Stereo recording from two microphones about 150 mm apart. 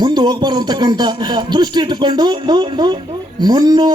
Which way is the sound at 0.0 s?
30° right (ahead or behind).